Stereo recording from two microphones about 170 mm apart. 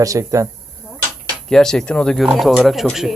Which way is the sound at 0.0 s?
20° right (ahead or behind).